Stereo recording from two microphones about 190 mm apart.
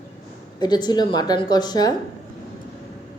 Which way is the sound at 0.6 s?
20° left (ahead or behind).